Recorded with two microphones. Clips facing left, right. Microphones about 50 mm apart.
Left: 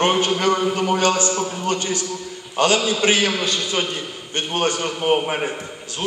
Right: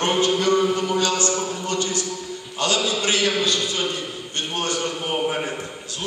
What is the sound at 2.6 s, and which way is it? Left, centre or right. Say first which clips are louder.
A man's voice: left 5 dB; left.